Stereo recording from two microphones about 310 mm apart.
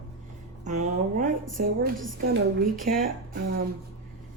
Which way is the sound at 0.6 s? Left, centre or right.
Right.